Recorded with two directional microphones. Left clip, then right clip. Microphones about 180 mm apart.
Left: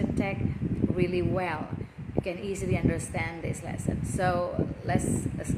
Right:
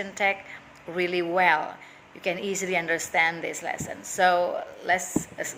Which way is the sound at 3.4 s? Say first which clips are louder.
Right 6 dB; 40° right (ahead or behind).